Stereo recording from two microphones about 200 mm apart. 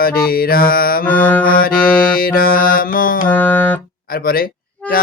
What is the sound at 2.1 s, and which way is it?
Speech, 45° left (ahead or behind).